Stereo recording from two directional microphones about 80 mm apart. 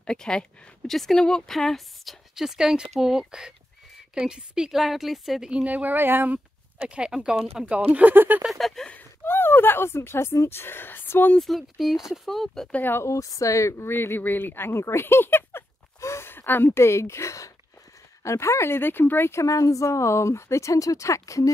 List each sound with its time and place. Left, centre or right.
0.0 s speech: centre
2.3 s a woman's voice: centre
5.5 s a woman's voice: centre
6.9 s a woman's voice: centre
8.5 s a woman's voice: centre
8.9 s speech: left
11.3 s a woman's voice: centre
12.7 s speech: left
13.0 s speech: left